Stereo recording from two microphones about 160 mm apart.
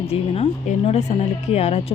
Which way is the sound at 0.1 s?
40° left (ahead or behind).